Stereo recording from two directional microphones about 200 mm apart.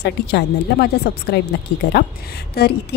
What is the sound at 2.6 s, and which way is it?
Speech, 50° left (ahead or behind).